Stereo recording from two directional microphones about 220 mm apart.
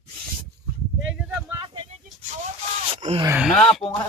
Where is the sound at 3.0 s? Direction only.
30° right (ahead or behind).